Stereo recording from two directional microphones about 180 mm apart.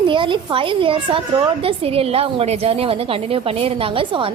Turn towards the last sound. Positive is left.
turn(degrees=-30)  # may be behind; listen again after turning